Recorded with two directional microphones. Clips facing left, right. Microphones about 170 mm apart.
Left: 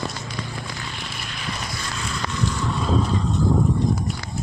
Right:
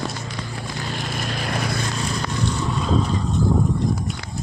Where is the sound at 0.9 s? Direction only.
45° right (ahead or behind).